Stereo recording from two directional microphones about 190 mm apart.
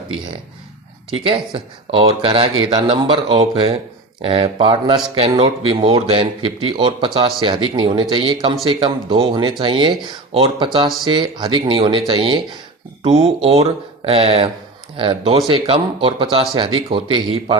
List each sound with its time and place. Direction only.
1.2 s speech: 30° right (ahead or behind)